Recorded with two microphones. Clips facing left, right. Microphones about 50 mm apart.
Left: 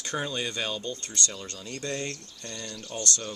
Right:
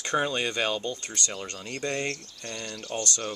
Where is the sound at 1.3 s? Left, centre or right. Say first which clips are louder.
Right 3 dB; right.